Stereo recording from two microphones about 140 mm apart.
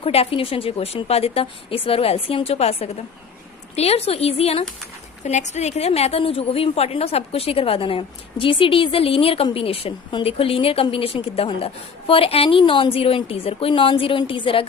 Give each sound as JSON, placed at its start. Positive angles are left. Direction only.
{"t": 0.0, "sound": "a woman's voice", "side_deg": 45}
{"t": 5.2, "sound": "a woman's voice", "side_deg": 55}